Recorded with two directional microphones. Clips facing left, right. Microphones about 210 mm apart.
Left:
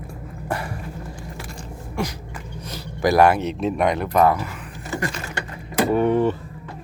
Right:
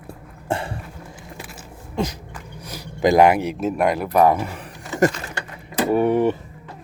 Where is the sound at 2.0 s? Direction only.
20° right (ahead or behind).